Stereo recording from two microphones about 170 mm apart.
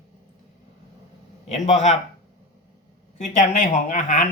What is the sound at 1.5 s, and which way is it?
Speech, 45° left (ahead or behind).